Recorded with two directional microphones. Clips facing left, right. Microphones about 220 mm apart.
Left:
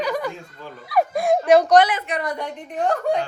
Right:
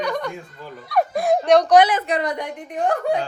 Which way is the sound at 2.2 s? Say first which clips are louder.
Right 2 dB; 15° right (ahead or behind).